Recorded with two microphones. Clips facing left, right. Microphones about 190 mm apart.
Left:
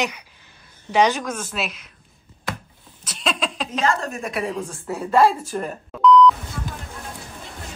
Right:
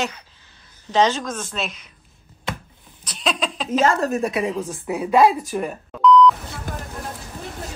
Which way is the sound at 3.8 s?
40° right (ahead or behind).